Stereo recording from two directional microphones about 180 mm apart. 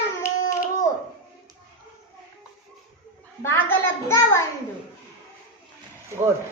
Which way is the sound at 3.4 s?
15° left (ahead or behind).